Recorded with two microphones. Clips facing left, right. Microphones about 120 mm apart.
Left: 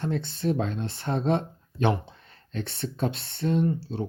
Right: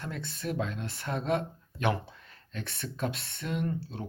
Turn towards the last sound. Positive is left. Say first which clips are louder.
# left 7 dB
turn(degrees=30)  # may be behind; listen again after turning